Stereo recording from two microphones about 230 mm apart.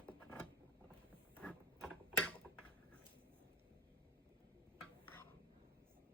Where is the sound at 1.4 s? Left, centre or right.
Centre.